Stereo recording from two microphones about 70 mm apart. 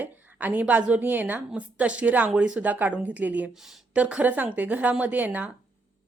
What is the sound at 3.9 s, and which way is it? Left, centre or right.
A woman's voice, centre.